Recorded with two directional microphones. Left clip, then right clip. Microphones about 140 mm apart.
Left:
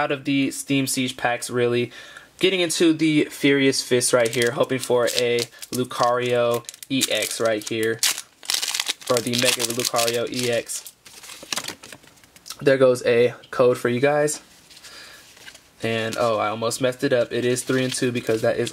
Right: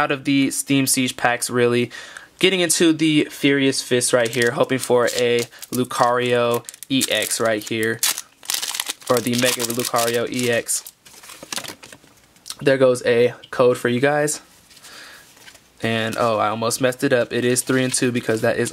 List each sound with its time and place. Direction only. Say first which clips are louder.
0.0 s speech: right 3 dB; 35° right (ahead or behind); by 3.7 s 15° right (ahead or behind)
4.4 s speech: right 2 dB; 30° right (ahead or behind)
8.0 s crumpling: even; 10° right (ahead or behind)
9.3 s speech: right 1 dB; 5° right (ahead or behind)
10.0 s speech: right 2 dB; 35° right (ahead or behind)
12.5 s speech: right 1 dB; 20° right (ahead or behind)
13.9 s speech: right 1 dB; 35° right (ahead or behind)
15.8 s speech: right 2 dB; 35° right (ahead or behind)